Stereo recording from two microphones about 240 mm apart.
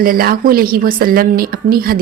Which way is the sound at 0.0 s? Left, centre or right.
Right.